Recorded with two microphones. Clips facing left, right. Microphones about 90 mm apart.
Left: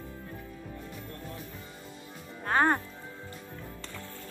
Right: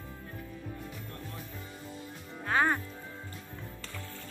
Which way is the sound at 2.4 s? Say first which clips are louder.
Left 3 dB; 35° left (ahead or behind).